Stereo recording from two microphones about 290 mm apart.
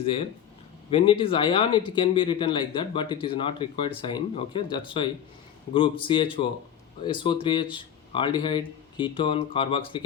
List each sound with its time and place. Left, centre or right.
0.9 s speech: centre